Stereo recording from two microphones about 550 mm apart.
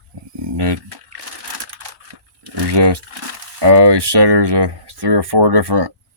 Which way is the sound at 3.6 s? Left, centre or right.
Right.